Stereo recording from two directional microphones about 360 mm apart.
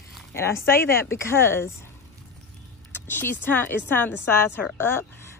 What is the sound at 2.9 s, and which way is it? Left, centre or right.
Speech, centre.